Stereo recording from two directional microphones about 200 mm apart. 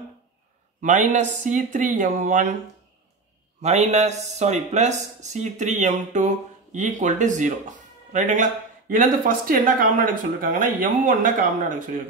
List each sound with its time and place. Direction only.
0.7 s speech: 40° right (ahead or behind)
3.6 s speech: 35° right (ahead or behind)